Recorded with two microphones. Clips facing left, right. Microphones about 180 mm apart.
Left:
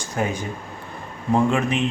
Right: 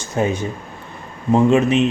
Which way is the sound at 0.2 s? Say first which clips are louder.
Right 5 dB; 25° right (ahead or behind).